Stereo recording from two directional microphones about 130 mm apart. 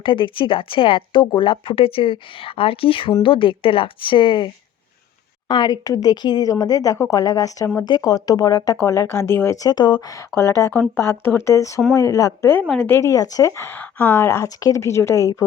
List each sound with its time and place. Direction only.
0.0 s speech: 40° left (ahead or behind)
5.5 s a woman's voice: 35° left (ahead or behind)
12.6 s a woman's voice: 5° left (ahead or behind)
12.9 s a woman's voice: 25° left (ahead or behind)